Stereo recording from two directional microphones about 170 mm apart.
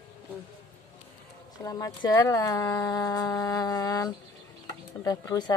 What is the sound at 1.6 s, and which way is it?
Speech, 20° left (ahead or behind).